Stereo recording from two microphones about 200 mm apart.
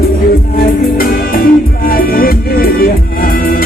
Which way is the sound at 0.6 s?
45° left (ahead or behind).